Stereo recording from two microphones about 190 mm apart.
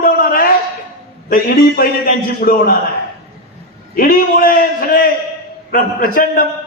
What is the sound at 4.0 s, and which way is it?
A man's voice, 50° left (ahead or behind).